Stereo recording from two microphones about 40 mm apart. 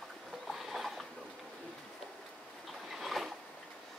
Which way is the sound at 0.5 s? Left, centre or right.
Centre.